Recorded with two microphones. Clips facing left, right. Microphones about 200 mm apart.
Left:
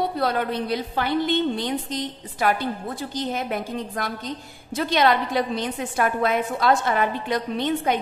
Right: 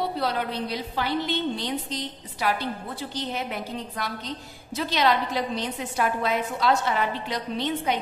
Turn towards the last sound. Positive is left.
turn(degrees=50)  # may be behind; listen again after turning